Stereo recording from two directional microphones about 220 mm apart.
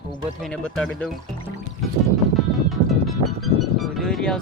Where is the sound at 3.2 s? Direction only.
Centre (ahead or behind).